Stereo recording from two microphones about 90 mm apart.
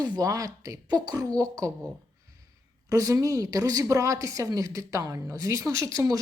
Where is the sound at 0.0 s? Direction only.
45° right (ahead or behind).